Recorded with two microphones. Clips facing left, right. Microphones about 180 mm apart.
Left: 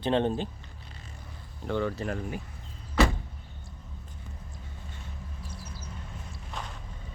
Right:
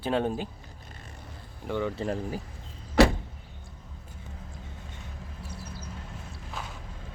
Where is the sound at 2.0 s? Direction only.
30° right (ahead or behind).